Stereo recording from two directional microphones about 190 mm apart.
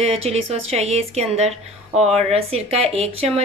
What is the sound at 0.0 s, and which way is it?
Speech, 30° right (ahead or behind).